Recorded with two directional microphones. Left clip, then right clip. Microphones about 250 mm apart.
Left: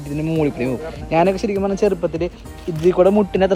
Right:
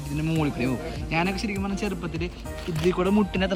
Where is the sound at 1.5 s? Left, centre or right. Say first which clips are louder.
Left 11 dB; left.